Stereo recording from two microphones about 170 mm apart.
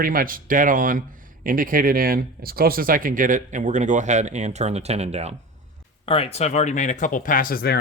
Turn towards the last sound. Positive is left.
turn(degrees=65)  # may be behind; listen again after turning